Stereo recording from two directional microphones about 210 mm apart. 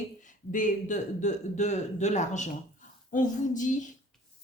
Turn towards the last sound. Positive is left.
turn(degrees=35)  # may be behind; listen again after turning